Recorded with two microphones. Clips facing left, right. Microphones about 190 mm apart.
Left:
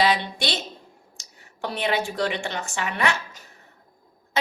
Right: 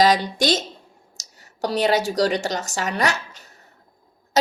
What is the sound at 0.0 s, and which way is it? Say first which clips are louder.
Speech: right 5 dB; 40° right (ahead or behind).